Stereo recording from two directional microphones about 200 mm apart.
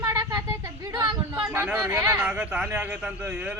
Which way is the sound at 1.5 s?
5° right (ahead or behind).